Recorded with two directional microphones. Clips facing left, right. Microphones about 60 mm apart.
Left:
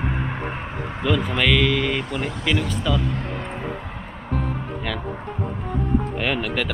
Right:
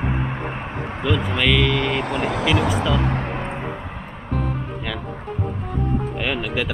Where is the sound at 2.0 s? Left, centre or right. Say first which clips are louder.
Right 4 dB; right.